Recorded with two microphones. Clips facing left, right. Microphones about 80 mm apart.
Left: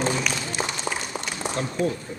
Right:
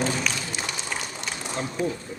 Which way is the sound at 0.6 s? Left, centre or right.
Left.